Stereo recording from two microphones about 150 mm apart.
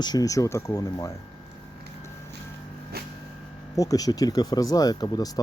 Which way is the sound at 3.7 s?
25° left (ahead or behind).